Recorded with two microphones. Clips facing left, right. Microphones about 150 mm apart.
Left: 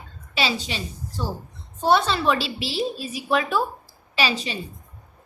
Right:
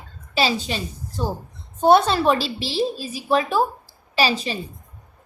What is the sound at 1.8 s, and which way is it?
A woman's voice, 45° right (ahead or behind).